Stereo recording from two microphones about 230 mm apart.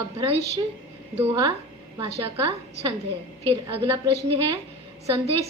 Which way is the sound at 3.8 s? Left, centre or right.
Right.